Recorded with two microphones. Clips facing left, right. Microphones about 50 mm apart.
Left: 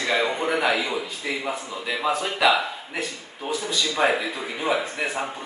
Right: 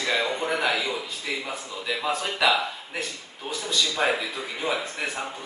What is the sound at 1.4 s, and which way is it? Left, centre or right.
Speech, left.